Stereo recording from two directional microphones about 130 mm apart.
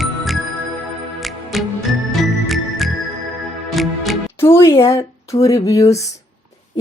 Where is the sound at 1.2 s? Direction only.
Centre (ahead or behind).